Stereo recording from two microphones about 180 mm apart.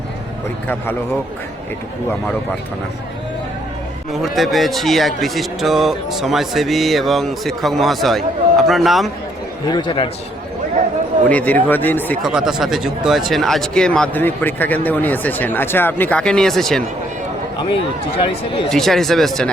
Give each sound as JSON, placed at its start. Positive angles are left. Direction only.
{"t": 4.1, "sound": "speech", "side_deg": 0}
{"t": 9.6, "sound": "speech", "side_deg": 25}
{"t": 11.3, "sound": "speech", "side_deg": 10}
{"t": 12.2, "sound": "speech", "side_deg": -5}
{"t": 18.2, "sound": "speech", "side_deg": 30}
{"t": 18.7, "sound": "speech", "side_deg": 0}